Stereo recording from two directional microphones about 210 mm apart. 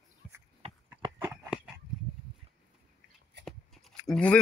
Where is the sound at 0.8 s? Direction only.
10° right (ahead or behind).